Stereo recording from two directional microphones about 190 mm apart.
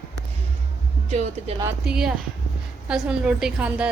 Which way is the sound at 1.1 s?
35° right (ahead or behind).